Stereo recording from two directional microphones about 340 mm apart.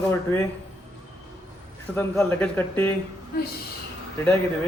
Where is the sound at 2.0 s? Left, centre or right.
Centre.